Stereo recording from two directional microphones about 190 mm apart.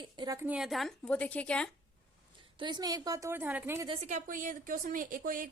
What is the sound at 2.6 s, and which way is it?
A woman's voice, 25° right (ahead or behind).